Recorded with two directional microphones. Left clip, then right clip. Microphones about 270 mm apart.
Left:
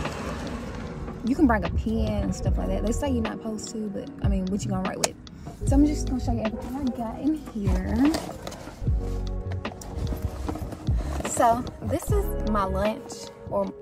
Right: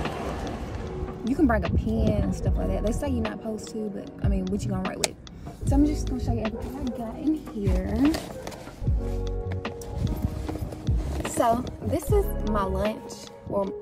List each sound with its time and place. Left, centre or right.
0.1 s vehicle: right
1.2 s speech: centre
10.9 s speech: centre